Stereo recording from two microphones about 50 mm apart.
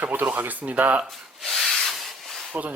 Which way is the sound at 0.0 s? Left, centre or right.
Right.